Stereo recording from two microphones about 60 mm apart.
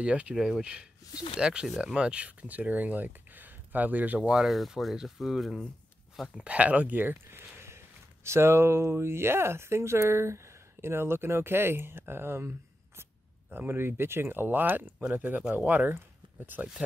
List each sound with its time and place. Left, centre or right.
0.0 s speech: centre
4.2 s speech: centre
6.3 s speech: right